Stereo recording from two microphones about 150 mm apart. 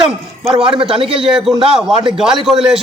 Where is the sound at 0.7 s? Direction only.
35° right (ahead or behind).